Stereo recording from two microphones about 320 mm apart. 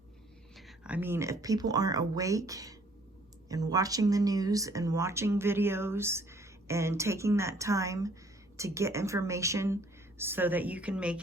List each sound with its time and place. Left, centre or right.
0.5 s a woman's voice: centre